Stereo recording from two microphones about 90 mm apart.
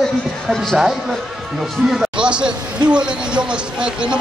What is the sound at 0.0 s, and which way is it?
Speech, 5° left (ahead or behind).